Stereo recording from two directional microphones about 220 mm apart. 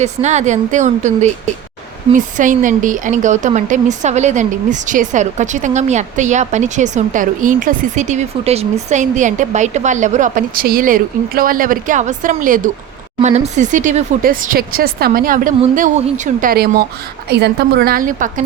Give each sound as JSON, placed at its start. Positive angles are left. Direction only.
{"t": 0.0, "sound": "a woman's voice", "side_deg": -30}